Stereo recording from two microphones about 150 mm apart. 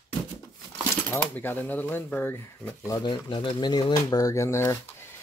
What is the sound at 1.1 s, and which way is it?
Speech, 15° left (ahead or behind).